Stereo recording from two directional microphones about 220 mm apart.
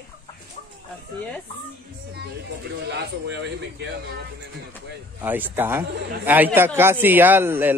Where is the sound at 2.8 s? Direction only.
50° right (ahead or behind).